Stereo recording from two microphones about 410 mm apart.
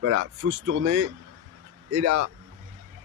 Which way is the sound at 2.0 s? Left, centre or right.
Right.